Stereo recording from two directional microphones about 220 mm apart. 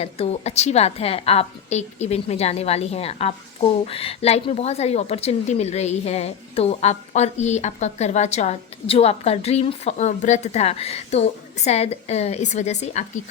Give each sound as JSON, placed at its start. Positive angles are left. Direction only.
{"t": 0.0, "sound": "a woman's voice", "side_deg": 30}